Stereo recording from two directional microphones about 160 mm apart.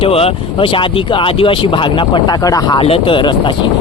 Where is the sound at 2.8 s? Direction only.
35° left (ahead or behind).